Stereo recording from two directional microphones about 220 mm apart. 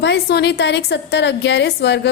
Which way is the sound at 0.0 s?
50° left (ahead or behind).